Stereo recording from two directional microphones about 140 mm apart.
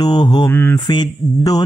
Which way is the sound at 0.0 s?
30° left (ahead or behind).